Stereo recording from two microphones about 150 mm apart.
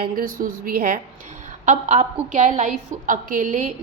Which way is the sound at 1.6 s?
55° right (ahead or behind).